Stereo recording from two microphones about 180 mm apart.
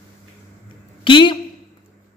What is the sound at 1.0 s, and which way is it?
Speech, 25° left (ahead or behind).